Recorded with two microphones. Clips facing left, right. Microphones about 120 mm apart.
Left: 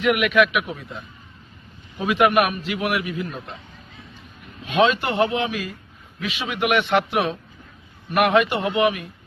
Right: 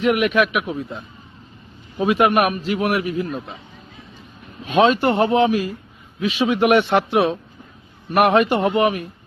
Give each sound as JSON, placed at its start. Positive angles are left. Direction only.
{"t": 0.0, "sound": "a man's voice", "side_deg": -30}
{"t": 3.3, "sound": "speech", "side_deg": -5}
{"t": 4.6, "sound": "a man's voice", "side_deg": -40}